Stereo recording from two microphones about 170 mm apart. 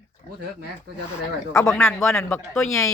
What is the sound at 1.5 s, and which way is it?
Speech, 15° left (ahead or behind).